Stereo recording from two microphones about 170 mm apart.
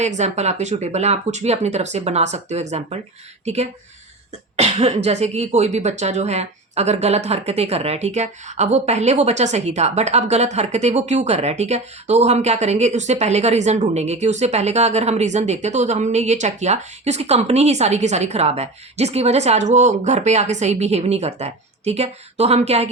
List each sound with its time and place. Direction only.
0.0 s a woman's voice: 40° right (ahead or behind)
4.5 s cough: 40° right (ahead or behind)
5.0 s a woman's voice: 40° right (ahead or behind)